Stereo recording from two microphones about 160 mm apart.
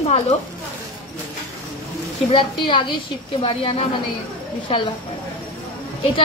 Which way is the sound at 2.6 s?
30° left (ahead or behind).